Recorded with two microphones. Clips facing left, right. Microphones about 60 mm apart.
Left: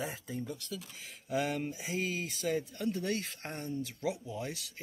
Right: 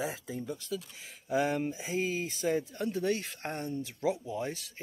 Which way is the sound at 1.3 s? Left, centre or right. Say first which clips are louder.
Right 4 dB; centre.